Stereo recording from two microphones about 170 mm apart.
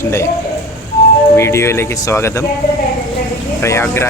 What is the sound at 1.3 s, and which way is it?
Speech, 15° left (ahead or behind).